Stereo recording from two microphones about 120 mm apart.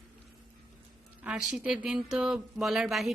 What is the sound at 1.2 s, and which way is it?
A woman's voice, 10° right (ahead or behind).